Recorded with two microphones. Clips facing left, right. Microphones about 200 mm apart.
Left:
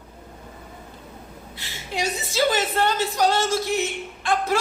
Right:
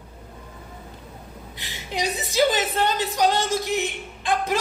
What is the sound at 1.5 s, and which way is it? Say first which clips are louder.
A woman's voice: even; 15° right (ahead or behind).